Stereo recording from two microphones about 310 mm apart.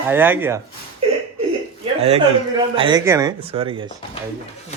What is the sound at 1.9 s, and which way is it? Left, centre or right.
A man's voice, centre.